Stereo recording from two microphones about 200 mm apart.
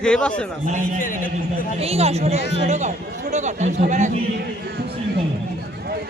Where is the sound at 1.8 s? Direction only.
30° right (ahead or behind).